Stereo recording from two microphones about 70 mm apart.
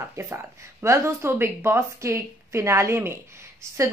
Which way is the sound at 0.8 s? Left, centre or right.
Right.